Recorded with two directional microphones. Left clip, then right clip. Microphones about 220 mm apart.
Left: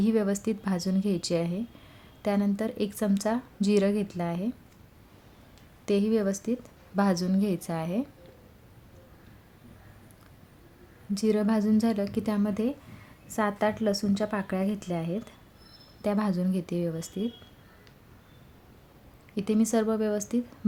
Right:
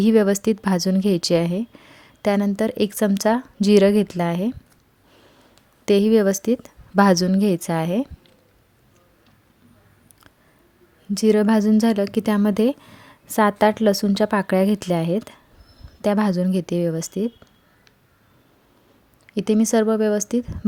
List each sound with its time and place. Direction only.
0.0 s a woman's voice: 35° right (ahead or behind)
5.8 s a woman's voice: 40° right (ahead or behind)
11.1 s a woman's voice: 35° right (ahead or behind)
19.3 s a woman's voice: 35° right (ahead or behind)